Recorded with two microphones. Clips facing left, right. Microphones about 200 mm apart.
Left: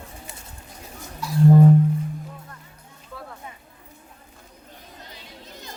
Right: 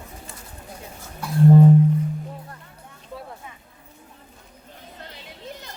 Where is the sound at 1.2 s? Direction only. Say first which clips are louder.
Even; 55° right (ahead or behind).